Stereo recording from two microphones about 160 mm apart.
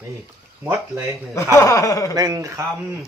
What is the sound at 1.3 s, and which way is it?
Speech, 20° left (ahead or behind).